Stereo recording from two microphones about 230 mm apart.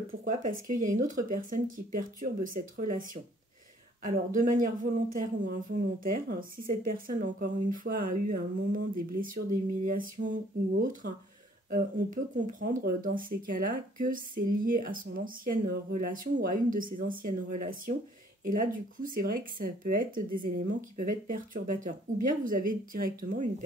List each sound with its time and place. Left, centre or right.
0.2 s speech: right
6.0 s speech: right